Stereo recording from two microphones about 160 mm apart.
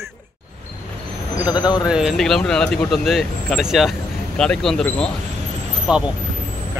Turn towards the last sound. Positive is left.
turn(degrees=-5)  # may be behind; listen again after turning